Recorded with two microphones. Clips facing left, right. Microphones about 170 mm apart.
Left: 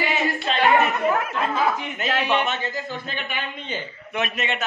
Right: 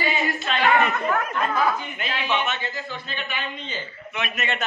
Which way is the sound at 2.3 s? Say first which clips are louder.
Left 3 dB; 40° left (ahead or behind).